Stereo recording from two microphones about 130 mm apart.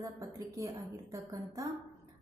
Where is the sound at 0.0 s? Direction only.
25° right (ahead or behind).